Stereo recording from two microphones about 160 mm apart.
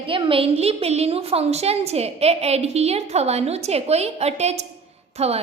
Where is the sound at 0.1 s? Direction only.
35° right (ahead or behind).